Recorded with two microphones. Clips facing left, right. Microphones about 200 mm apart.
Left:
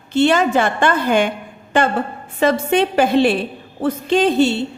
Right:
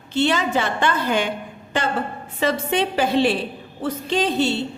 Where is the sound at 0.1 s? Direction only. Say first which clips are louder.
Left 5 dB; 50° left (ahead or behind).